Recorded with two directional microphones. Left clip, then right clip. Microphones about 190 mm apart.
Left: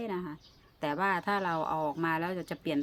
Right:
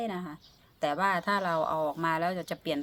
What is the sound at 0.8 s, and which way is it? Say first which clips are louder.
Speech: right 3 dB; 20° left (ahead or behind).